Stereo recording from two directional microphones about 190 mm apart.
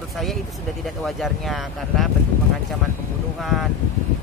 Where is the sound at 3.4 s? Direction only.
Centre (ahead or behind).